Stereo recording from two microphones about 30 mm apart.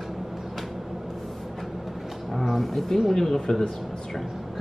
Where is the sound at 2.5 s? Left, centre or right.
Centre.